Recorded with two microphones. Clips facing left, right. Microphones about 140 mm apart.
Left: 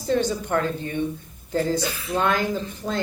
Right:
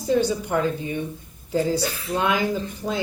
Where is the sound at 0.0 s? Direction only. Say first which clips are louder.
Right 2 dB; 10° right (ahead or behind).